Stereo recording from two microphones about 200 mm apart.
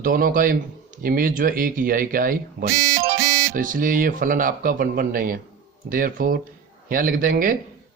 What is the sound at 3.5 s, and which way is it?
Speech, 40° right (ahead or behind).